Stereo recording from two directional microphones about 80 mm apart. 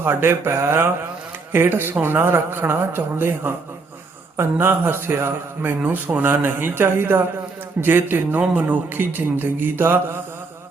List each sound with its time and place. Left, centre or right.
0.0 s a man's voice: right
4.6 s a man's voice: right